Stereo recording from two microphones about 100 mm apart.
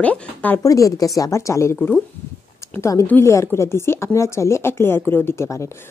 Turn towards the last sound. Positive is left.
turn(degrees=30)  # may be behind; listen again after turning